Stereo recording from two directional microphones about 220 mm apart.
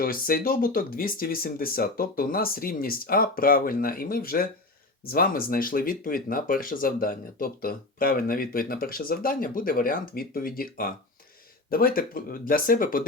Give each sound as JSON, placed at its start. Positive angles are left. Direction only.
{"t": 0.0, "sound": "speech", "side_deg": 40}